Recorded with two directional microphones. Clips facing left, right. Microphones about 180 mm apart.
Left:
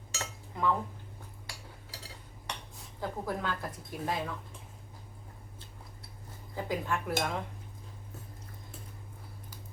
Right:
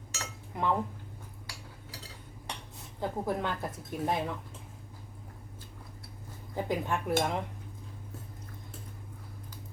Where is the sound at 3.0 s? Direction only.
20° right (ahead or behind).